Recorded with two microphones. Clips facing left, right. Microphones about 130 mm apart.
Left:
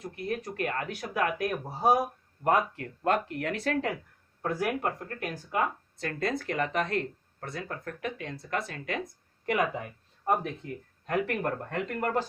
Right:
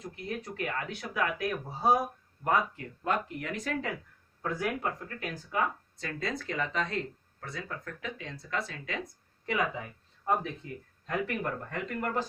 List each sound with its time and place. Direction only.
0.0 s speech: 55° left (ahead or behind)
2.4 s speech: 65° left (ahead or behind)
4.4 s speech: 15° left (ahead or behind)
4.8 s speech: 55° left (ahead or behind)
11.0 s speech: 55° left (ahead or behind)